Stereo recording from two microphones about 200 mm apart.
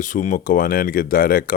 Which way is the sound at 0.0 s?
40° left (ahead or behind).